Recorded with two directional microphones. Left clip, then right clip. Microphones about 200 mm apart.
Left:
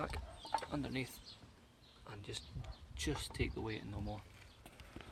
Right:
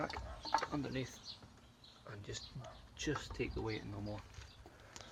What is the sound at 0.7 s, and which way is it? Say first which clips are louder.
Speech: even; 30° left (ahead or behind).